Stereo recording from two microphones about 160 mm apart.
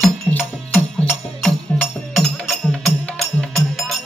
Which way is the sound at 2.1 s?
Centre (ahead or behind).